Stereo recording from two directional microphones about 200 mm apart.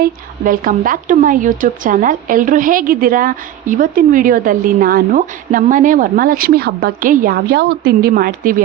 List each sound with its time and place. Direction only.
0.0 s a woman's voice: 45° right (ahead or behind)